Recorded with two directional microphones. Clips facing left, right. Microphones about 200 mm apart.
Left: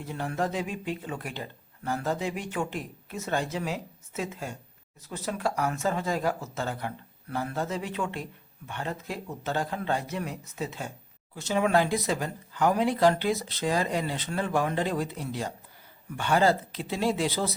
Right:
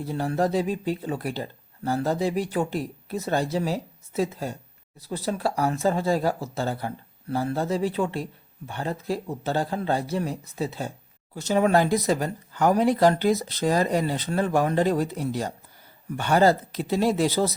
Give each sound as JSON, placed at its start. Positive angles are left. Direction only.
{"t": 0.0, "sound": "speech", "side_deg": -35}